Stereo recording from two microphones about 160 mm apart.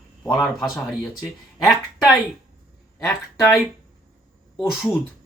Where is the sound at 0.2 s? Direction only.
Centre (ahead or behind).